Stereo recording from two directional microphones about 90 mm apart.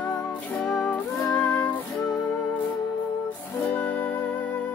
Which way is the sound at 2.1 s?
5° left (ahead or behind).